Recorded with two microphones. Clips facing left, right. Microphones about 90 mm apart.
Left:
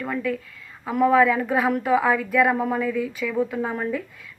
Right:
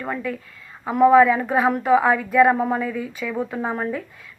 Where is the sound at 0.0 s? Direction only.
15° right (ahead or behind); by 2.6 s 30° right (ahead or behind).